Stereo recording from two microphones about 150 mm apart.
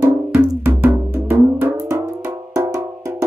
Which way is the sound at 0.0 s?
20° right (ahead or behind).